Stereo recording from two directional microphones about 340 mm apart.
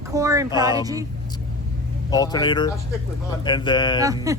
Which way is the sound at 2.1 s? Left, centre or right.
Centre.